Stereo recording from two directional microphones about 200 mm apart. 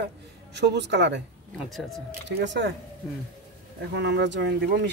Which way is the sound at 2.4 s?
60° right (ahead or behind).